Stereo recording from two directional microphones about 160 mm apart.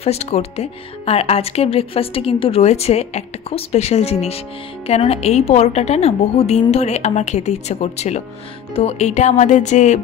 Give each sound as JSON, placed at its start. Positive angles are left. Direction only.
{"t": 0.0, "sound": "a woman's voice", "side_deg": 40}